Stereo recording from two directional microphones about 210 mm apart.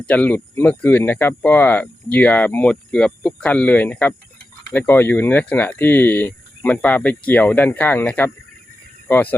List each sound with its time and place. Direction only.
0.0 s speech: 5° left (ahead or behind)